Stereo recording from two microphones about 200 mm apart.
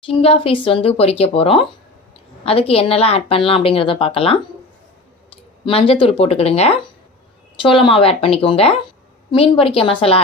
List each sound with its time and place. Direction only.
0.0 s a woman's voice: 25° left (ahead or behind)
5.6 s a woman's voice: 25° left (ahead or behind)